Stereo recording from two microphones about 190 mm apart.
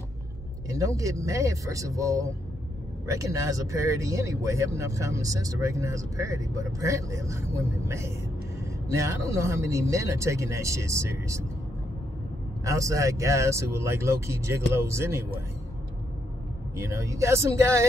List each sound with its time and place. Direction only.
0.7 s speech: 15° right (ahead or behind)
12.6 s speech: 15° right (ahead or behind)
16.7 s speech: 15° right (ahead or behind)